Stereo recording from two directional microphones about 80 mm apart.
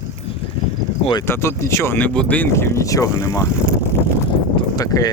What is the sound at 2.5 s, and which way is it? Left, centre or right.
Speech, left.